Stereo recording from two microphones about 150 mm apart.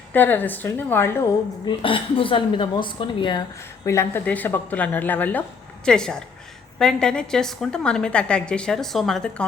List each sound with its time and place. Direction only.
0.1 s speech: 10° left (ahead or behind)
1.6 s a woman's voice: 35° left (ahead or behind)
3.8 s a woman's voice: 15° left (ahead or behind)